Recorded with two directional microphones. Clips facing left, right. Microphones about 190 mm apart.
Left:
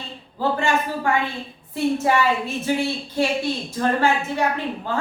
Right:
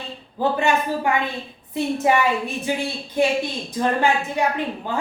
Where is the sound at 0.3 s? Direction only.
20° right (ahead or behind).